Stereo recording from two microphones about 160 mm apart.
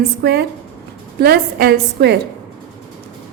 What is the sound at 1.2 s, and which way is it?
Speech, 75° right (ahead or behind).